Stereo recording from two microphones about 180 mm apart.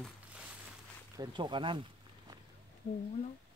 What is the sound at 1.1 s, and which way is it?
Speech, 25° right (ahead or behind).